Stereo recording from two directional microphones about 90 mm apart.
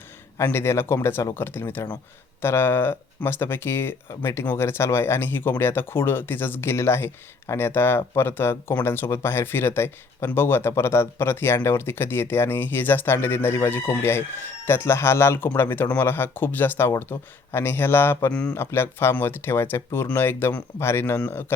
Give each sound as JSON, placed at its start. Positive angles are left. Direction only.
{"t": 0.3, "sound": "speech", "side_deg": 30}